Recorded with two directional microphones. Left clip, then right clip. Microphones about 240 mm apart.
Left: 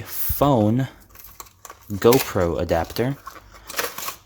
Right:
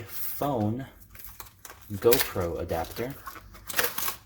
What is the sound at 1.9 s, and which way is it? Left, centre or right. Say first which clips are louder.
Speech: left 7 dB; left.